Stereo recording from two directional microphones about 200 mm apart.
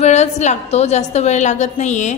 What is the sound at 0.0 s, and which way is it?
A woman's voice, 35° left (ahead or behind).